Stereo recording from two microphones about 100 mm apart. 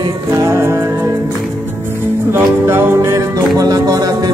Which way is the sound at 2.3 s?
25° right (ahead or behind).